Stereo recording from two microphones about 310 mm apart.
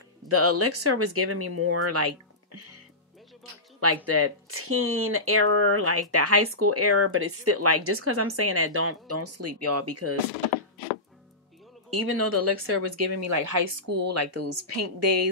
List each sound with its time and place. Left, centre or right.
0.3 s speech: right
3.8 s speech: right
11.9 s speech: right